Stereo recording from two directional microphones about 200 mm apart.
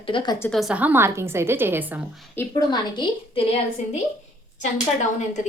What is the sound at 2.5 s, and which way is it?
Speech, 20° left (ahead or behind).